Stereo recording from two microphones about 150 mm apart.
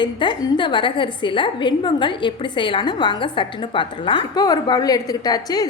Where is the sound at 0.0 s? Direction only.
30° left (ahead or behind).